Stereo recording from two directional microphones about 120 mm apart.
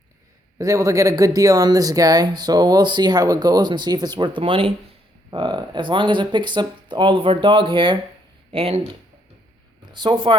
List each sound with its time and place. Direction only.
0.6 s speech: 25° right (ahead or behind)
4.4 s speech: 50° right (ahead or behind)
8.5 s speech: 55° right (ahead or behind)
9.9 s speech: 40° right (ahead or behind)